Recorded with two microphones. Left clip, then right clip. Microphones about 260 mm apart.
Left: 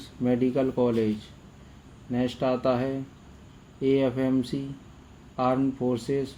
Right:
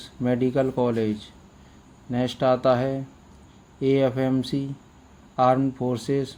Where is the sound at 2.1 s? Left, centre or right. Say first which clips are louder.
Right 5 dB; right.